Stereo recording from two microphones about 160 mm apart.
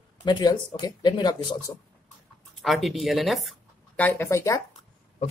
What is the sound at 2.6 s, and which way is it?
Speech, centre (ahead or behind).